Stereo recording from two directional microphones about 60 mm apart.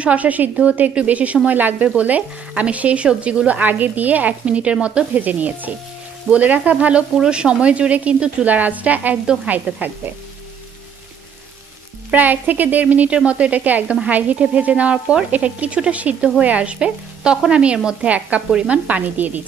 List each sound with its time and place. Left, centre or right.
0.0 s speech: right
9.2 s speech: centre
9.5 s speech: right
12.1 s speech: right